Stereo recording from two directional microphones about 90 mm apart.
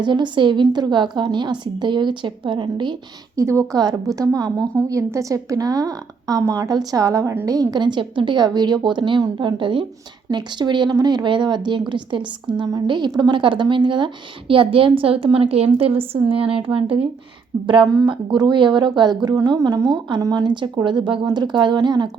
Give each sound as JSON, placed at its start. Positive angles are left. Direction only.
{"t": 0.0, "sound": "a woman's voice", "side_deg": -60}
{"t": 3.3, "sound": "a woman's voice", "side_deg": -30}
{"t": 3.8, "sound": "a woman's voice", "side_deg": -45}
{"t": 18.0, "sound": "a woman's voice", "side_deg": -60}